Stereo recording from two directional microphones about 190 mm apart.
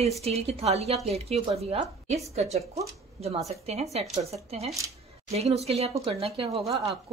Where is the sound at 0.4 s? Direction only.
35° right (ahead or behind).